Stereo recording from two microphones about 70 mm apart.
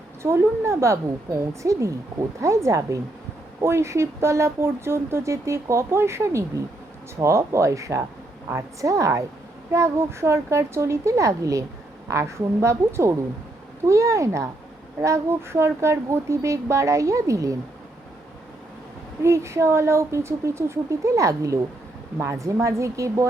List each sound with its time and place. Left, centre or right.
0.2 s speech: right
19.2 s speech: right